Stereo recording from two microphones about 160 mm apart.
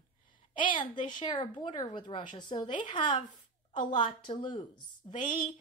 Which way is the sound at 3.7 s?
50° left (ahead or behind).